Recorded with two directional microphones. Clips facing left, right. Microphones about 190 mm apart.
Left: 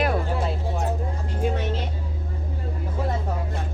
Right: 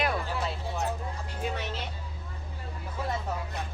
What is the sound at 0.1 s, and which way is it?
Music, 30° left (ahead or behind).